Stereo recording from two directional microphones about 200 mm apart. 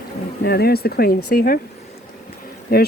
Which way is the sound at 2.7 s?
50° left (ahead or behind).